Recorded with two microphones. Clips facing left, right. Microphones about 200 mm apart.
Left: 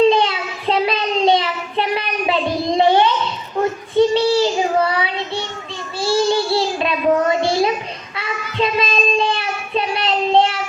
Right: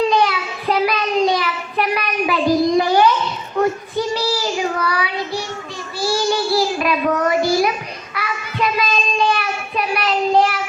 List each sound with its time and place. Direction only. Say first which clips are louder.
0.0 s child singing: left 3 dB; 25° left (ahead or behind)